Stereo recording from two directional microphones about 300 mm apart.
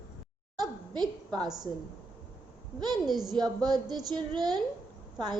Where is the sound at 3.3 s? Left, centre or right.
Centre.